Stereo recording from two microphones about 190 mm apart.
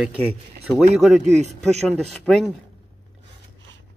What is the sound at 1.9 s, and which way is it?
Speech, centre (ahead or behind).